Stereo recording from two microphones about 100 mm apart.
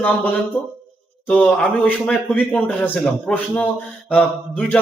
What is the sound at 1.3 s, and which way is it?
A man's voice, 10° left (ahead or behind).